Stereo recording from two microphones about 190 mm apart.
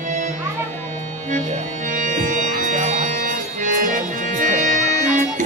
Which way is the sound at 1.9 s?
40° right (ahead or behind).